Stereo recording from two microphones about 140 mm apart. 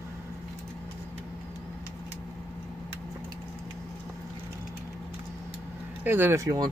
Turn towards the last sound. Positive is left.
turn(degrees=-25)  # may be behind; listen again after turning